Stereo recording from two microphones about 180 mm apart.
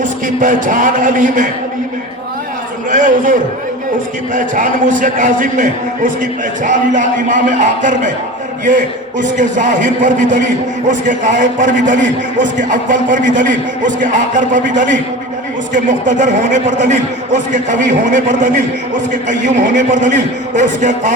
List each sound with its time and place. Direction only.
0.0 s a man's voice: 45° right (ahead or behind)
2.9 s a man's voice: 45° right (ahead or behind)